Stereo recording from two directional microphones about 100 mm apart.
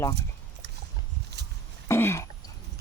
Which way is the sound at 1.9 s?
25° left (ahead or behind).